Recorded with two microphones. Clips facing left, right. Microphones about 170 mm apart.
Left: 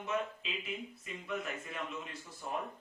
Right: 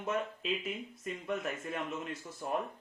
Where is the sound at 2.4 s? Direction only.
50° right (ahead or behind).